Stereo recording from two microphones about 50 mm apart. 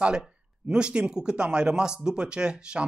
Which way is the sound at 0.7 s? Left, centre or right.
Centre.